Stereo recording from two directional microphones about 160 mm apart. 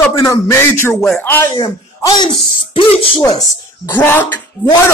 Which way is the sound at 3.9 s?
10° left (ahead or behind).